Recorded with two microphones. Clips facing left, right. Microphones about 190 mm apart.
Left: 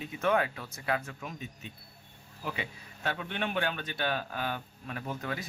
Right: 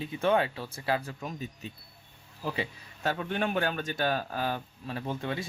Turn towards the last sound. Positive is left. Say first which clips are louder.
# right 3 dB
turn(degrees=-25)  # may be behind; listen again after turning